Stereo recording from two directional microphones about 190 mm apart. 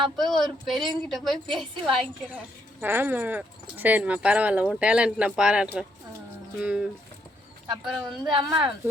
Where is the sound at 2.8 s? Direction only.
10° right (ahead or behind).